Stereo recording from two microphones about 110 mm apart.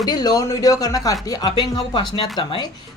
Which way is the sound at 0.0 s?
35° left (ahead or behind).